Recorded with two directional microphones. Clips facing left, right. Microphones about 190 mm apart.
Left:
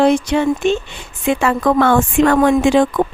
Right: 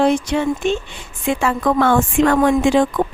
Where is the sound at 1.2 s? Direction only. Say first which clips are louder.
Left 3 dB; 65° left (ahead or behind).